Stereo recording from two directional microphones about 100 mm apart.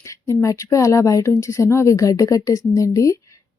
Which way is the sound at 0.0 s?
30° left (ahead or behind).